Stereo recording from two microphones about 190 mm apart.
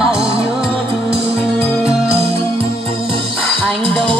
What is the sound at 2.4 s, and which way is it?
Music, 15° left (ahead or behind).